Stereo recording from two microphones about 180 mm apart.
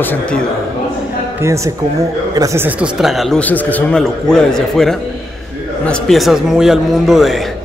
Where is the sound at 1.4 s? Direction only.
15° right (ahead or behind).